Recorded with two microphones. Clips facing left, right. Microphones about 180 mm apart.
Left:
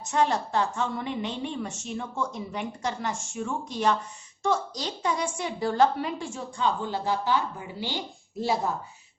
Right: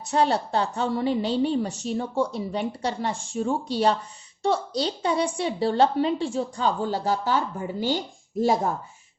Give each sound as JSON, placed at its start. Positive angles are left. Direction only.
{"t": 0.0, "sound": "a woman's voice", "side_deg": -35}